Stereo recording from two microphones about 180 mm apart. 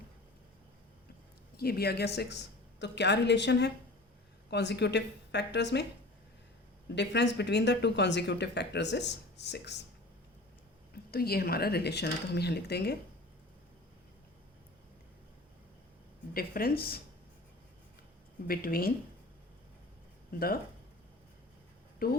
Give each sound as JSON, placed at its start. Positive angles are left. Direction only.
{"t": 1.5, "sound": "speech", "side_deg": 60}
{"t": 6.8, "sound": "speech", "side_deg": 75}
{"t": 11.1, "sound": "speech", "side_deg": 55}
{"t": 16.3, "sound": "speech", "side_deg": 55}
{"t": 18.4, "sound": "speech", "side_deg": 55}
{"t": 22.0, "sound": "speech", "side_deg": 55}